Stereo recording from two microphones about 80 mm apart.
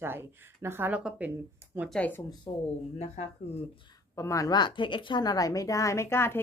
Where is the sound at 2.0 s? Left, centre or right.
Left.